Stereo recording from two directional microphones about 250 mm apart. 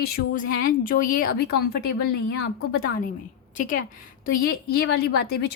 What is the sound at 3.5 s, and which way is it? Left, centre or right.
A woman's voice, left.